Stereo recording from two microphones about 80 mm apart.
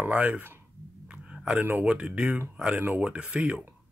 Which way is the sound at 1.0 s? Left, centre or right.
Centre.